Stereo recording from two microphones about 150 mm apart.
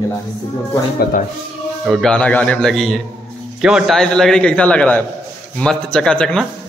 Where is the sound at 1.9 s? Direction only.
5° left (ahead or behind).